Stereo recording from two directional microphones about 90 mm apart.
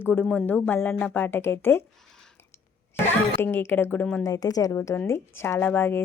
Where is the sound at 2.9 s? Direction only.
25° left (ahead or behind).